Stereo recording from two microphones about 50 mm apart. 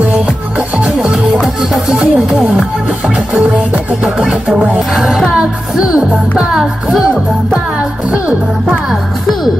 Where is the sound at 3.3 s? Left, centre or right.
Right.